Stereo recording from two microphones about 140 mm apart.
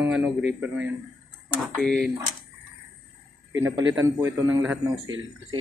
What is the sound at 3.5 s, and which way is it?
A man's voice, 20° right (ahead or behind).